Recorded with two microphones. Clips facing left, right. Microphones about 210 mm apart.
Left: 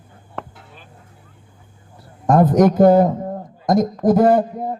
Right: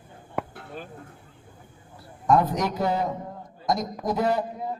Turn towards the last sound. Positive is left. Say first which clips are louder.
# left 10 dB
turn(degrees=50)  # may be behind; listen again after turning